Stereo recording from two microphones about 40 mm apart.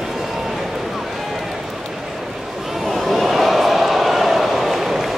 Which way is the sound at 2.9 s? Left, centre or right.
Centre.